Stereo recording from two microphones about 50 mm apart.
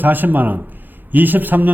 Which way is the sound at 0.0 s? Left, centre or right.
Right.